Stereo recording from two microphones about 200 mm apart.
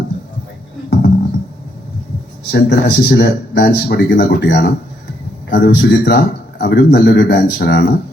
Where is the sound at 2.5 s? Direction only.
55° left (ahead or behind).